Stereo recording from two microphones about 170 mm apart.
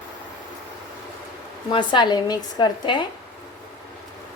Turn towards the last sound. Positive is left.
turn(degrees=25)  # may be behind; listen again after turning